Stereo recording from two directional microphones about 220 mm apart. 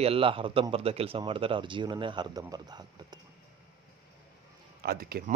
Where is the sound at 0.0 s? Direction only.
25° right (ahead or behind).